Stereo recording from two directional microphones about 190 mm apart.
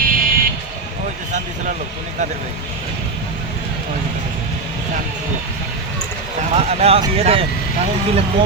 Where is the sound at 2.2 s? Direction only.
40° right (ahead or behind).